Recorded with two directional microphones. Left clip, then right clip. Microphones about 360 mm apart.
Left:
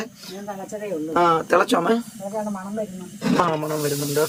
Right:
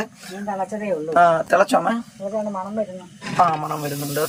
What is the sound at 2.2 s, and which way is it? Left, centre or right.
Speech, right.